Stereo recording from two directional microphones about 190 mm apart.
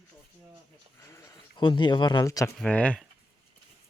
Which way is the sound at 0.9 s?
15° left (ahead or behind).